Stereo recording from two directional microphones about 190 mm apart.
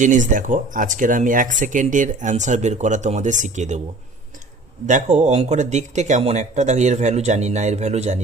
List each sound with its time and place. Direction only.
0.0 s speech: 40° right (ahead or behind)
4.9 s speech: 40° right (ahead or behind)